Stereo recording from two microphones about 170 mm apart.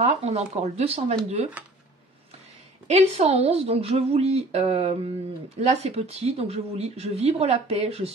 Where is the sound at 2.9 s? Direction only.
40° right (ahead or behind).